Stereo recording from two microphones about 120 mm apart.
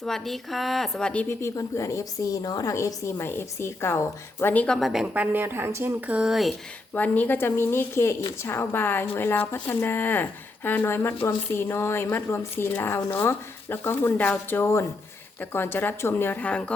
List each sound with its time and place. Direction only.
0.0 s a woman's voice: centre (ahead or behind)
1.4 s speech: 25° left (ahead or behind); by 4.9 s 5° left (ahead or behind)
4.9 s speech: 5° right (ahead or behind)
6.9 s speech: 15° left (ahead or behind)